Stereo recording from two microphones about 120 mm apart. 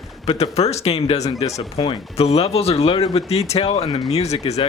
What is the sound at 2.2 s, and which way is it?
Speech, 60° left (ahead or behind).